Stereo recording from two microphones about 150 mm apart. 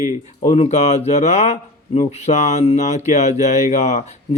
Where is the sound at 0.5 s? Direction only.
40° left (ahead or behind).